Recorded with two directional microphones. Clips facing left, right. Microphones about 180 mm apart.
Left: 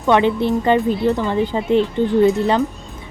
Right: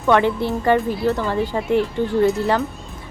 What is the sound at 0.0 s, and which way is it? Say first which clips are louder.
A woman's voice: left 2 dB; 20° left (ahead or behind).